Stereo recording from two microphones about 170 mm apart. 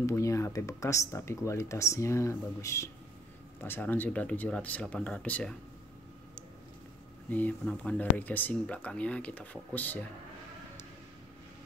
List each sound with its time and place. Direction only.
0.0 s speech: 15° left (ahead or behind)
7.2 s speech: 10° left (ahead or behind)